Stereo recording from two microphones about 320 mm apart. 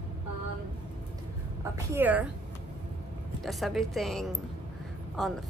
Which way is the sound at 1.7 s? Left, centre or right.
Centre.